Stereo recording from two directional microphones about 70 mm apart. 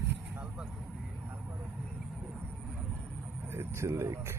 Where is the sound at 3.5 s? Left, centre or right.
Right.